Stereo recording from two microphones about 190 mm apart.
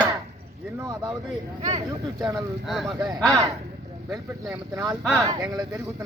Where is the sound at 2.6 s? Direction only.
Centre (ahead or behind).